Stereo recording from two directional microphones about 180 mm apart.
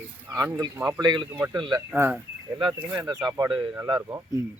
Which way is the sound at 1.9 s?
10° right (ahead or behind).